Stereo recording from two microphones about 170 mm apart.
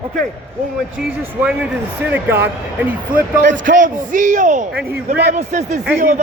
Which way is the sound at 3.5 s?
50° right (ahead or behind).